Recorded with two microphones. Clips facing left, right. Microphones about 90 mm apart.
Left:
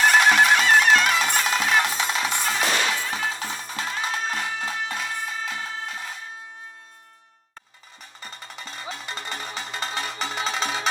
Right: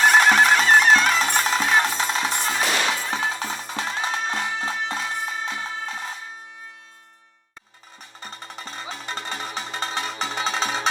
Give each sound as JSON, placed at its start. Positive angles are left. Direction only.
{"t": 0.1, "sound": "music", "side_deg": -35}
{"t": 8.2, "sound": "music", "side_deg": -35}